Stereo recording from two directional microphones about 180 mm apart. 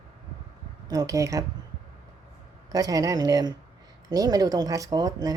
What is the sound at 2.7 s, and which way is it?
Speech, 20° right (ahead or behind).